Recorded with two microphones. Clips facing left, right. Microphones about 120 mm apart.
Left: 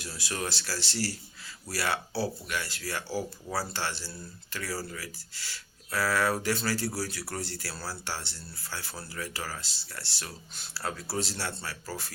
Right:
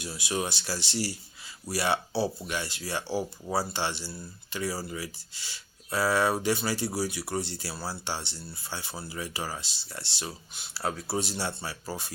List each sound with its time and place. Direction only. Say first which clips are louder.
0.0 s speech: right 4 dB; 20° right (ahead or behind)